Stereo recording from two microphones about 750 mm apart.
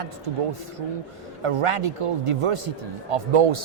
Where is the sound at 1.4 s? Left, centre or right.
Right.